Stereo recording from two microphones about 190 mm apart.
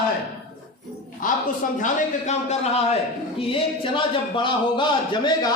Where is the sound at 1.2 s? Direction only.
45° left (ahead or behind).